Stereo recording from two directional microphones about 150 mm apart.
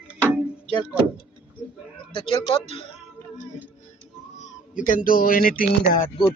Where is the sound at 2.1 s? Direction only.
35° left (ahead or behind).